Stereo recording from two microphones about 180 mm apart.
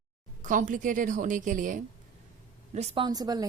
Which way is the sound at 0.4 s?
45° right (ahead or behind).